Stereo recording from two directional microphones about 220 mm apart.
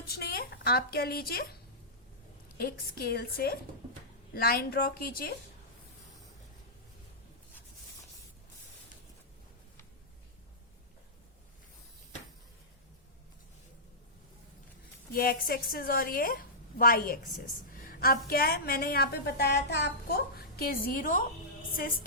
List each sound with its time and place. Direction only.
0.1 s a woman's voice: 45° left (ahead or behind)
2.6 s a woman's voice: 45° left (ahead or behind)
15.1 s a woman's voice: 40° left (ahead or behind)